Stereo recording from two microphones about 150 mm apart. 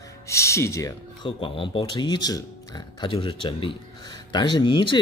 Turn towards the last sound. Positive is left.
turn(degrees=30)  # may be behind; listen again after turning